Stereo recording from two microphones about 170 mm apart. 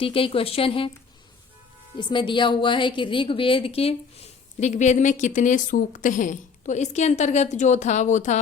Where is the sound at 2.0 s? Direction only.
25° left (ahead or behind).